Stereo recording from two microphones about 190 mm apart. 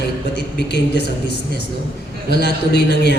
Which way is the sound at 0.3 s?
65° left (ahead or behind).